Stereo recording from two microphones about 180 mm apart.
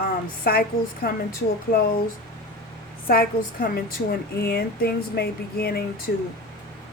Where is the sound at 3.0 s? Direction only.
55° left (ahead or behind).